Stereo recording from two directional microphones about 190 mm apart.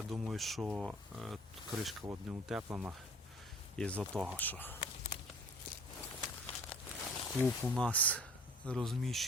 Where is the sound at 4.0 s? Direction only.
10° right (ahead or behind).